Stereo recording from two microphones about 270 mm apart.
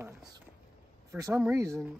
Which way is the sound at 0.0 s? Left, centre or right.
Centre.